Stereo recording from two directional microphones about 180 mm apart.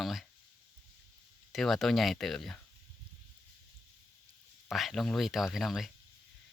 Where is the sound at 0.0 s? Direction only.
Centre (ahead or behind).